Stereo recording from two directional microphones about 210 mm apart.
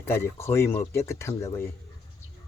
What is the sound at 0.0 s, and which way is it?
Speech, 10° left (ahead or behind).